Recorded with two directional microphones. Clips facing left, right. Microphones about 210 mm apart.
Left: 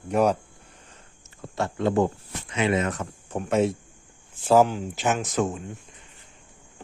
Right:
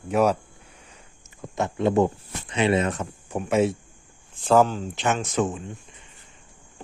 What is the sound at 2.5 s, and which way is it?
Speech, 30° right (ahead or behind).